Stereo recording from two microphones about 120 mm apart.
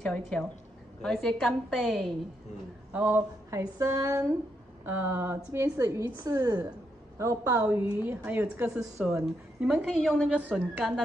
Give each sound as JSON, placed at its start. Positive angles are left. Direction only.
{"t": 0.0, "sound": "a woman's voice", "side_deg": 10}
{"t": 2.9, "sound": "a woman's voice", "side_deg": -15}